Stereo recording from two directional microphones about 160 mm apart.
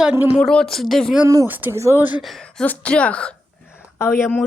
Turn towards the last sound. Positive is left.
turn(degrees=10)  # may be behind; listen again after turning